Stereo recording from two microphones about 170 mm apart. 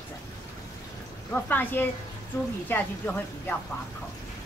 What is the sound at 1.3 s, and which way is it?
Speech, 10° left (ahead or behind).